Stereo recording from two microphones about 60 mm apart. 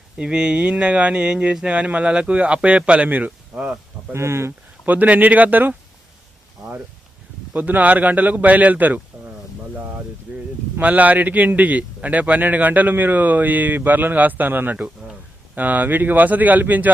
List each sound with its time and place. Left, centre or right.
0.2 s a man's voice: centre
4.1 s speech: right
4.9 s a man's voice: right
7.5 s a man's voice: right
10.3 s a sound: right
10.8 s a man's voice: right